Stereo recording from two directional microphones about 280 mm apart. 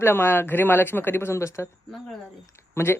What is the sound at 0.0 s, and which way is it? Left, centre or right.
A woman's voice, centre.